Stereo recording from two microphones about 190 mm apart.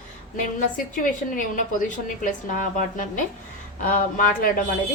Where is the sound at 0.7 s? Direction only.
45° left (ahead or behind).